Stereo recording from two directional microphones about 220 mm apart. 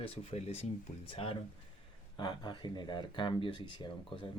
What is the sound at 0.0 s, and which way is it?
Speech, 25° left (ahead or behind).